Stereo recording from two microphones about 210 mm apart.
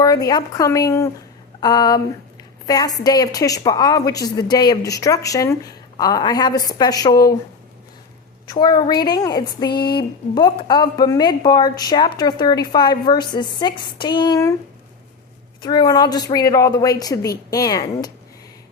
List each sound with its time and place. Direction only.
0.0 s a woman's voice: 15° left (ahead or behind)
8.4 s a woman's voice: 20° left (ahead or behind)
15.6 s a woman's voice: 20° left (ahead or behind)